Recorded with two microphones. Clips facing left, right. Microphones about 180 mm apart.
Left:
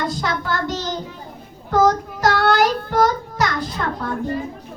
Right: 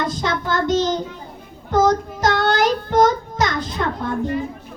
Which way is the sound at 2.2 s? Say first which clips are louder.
Left 1 dB; 20° right (ahead or behind).